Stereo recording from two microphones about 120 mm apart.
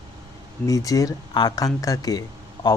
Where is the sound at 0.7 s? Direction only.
30° left (ahead or behind).